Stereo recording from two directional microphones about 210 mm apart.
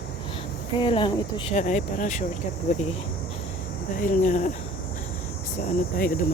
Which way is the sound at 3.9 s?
40° left (ahead or behind).